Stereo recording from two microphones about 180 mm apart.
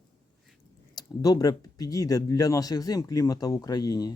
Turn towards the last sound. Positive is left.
turn(degrees=20)  # may be behind; listen again after turning